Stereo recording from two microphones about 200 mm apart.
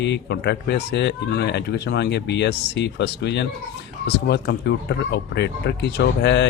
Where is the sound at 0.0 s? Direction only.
60° left (ahead or behind).